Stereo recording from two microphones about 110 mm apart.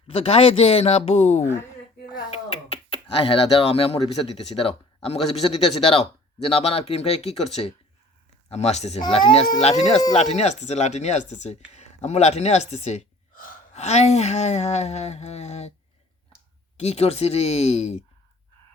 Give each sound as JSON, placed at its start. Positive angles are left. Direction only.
{"t": 0.1, "sound": "speech", "side_deg": 65}
{"t": 2.3, "sound": "speech", "side_deg": 65}
{"t": 9.0, "sound": "speech", "side_deg": 45}
{"t": 9.6, "sound": "speech", "side_deg": 85}
{"t": 16.7, "sound": "speech", "side_deg": 70}